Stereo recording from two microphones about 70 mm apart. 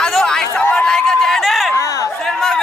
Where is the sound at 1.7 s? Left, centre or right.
Left.